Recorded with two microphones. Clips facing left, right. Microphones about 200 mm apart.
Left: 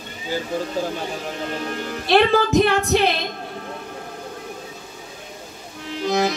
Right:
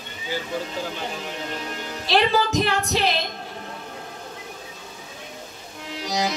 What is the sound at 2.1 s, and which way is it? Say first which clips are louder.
Speech: left 4 dB; 55° left (ahead or behind).